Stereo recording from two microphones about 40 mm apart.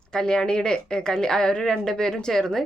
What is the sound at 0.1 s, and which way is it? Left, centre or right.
A woman's voice, centre.